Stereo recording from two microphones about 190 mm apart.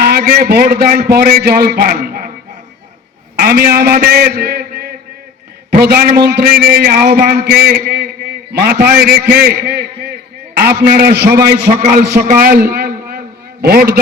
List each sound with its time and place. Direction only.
0.0 s a man's voice: 55° right (ahead or behind)
3.3 s a man's voice: 55° right (ahead or behind)